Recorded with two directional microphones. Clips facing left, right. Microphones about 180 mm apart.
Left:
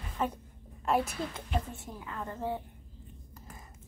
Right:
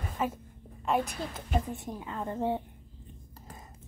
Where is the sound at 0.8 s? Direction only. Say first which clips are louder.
Even; centre (ahead or behind).